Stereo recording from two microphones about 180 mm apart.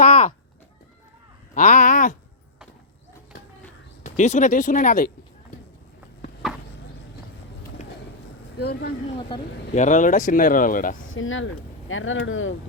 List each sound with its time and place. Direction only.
0.0 s horse: 35° left (ahead or behind)
1.5 s speech: 45° left (ahead or behind)
4.0 s speech: 40° left (ahead or behind)
8.5 s speech: 60° left (ahead or behind)
9.7 s speech: 45° left (ahead or behind)
11.1 s speech: 90° left